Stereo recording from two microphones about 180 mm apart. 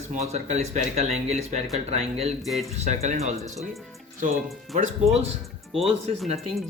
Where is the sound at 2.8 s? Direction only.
40° right (ahead or behind).